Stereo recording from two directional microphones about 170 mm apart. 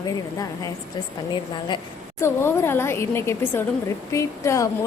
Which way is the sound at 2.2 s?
15° left (ahead or behind).